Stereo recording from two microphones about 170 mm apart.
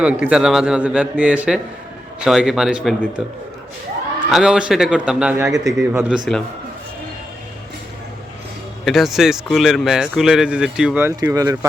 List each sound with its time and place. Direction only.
0.0 s a man's voice: 5° right (ahead or behind)
6.1 s speech: centre (ahead or behind)
8.8 s speech: centre (ahead or behind)
11.2 s speech: 20° right (ahead or behind)